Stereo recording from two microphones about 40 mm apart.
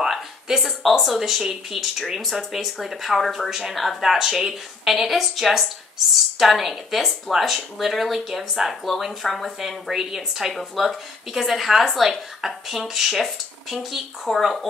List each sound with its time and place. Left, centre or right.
0.6 s speech: centre